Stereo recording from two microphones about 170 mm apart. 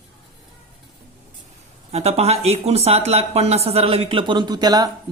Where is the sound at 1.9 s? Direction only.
40° right (ahead or behind).